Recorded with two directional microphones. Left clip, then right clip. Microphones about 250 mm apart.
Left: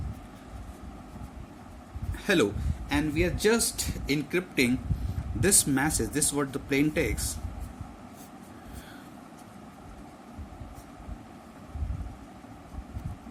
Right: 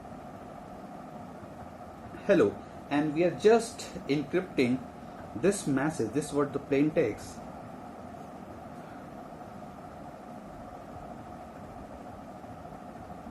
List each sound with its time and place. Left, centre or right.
2.2 s speech: left